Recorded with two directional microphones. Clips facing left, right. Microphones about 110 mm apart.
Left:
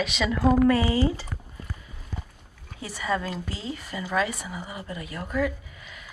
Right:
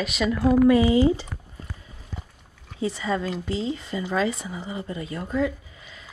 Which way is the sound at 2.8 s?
25° right (ahead or behind).